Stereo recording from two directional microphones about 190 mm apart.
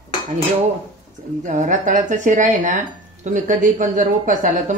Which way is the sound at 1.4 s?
40° right (ahead or behind).